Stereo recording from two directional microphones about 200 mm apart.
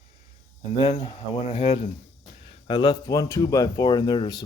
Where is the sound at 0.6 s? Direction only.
30° left (ahead or behind).